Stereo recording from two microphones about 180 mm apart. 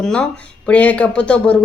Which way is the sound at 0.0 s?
5° left (ahead or behind).